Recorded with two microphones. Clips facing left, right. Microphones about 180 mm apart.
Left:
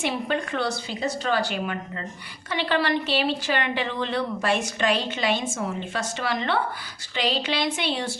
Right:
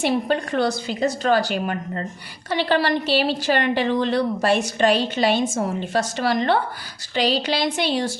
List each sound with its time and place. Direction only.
0.0 s speech: 35° right (ahead or behind)